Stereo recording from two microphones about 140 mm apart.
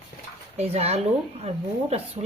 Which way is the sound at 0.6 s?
50° right (ahead or behind).